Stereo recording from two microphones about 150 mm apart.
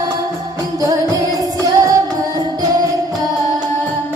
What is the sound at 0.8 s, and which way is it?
Music, 25° right (ahead or behind).